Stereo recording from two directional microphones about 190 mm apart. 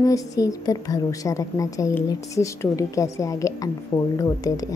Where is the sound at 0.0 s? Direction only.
15° left (ahead or behind).